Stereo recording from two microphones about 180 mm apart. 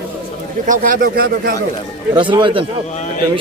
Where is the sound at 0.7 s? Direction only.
50° right (ahead or behind).